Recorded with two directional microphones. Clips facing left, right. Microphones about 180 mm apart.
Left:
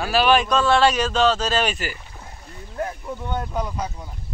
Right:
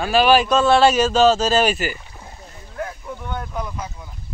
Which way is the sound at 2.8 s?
25° left (ahead or behind).